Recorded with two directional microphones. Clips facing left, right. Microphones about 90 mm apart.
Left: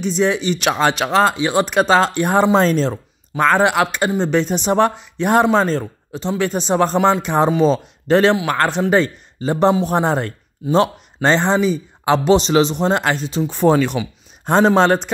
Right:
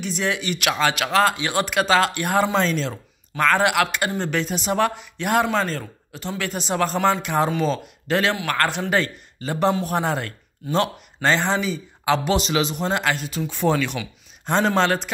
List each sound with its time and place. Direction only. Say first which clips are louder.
0.0 s speech: left 7 dB; 25° left (ahead or behind)
2.6 s speech: left 7 dB; 40° left (ahead or behind)